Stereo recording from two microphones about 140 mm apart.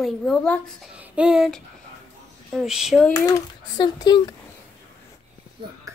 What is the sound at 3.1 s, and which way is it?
Speech, 25° left (ahead or behind).